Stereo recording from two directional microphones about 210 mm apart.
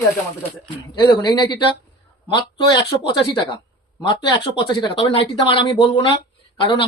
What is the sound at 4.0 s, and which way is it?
Speech, 20° left (ahead or behind).